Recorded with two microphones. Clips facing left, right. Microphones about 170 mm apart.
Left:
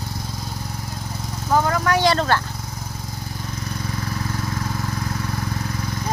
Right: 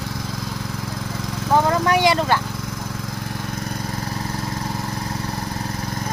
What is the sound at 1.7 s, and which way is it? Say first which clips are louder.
Vehicle: right 1 dB; 20° right (ahead or behind).